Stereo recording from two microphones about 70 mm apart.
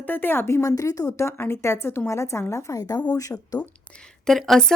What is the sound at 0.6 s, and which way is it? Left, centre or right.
A woman's voice, left.